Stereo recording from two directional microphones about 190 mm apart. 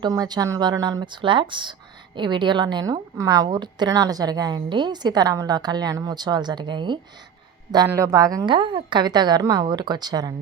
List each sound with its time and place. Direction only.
0.0 s a woman's voice: 20° right (ahead or behind)